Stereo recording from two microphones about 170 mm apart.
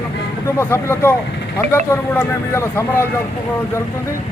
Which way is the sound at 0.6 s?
15° left (ahead or behind).